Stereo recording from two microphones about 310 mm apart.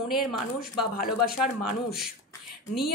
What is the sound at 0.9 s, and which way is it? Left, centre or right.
Speech, left.